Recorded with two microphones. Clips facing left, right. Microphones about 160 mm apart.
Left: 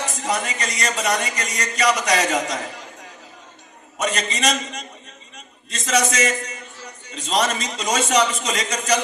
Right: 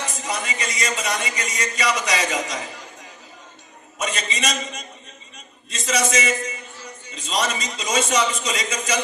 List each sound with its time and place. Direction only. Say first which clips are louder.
0.2 s a man's voice: left 4 dB; 45° left (ahead or behind)
4.0 s a man's voice: left 4 dB; 40° left (ahead or behind)